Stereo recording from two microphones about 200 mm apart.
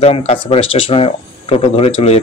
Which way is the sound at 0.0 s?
30° left (ahead or behind).